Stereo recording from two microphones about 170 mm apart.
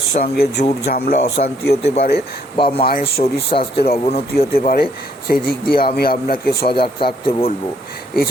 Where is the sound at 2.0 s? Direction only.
65° left (ahead or behind).